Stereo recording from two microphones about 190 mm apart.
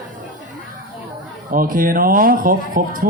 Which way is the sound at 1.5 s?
50° right (ahead or behind).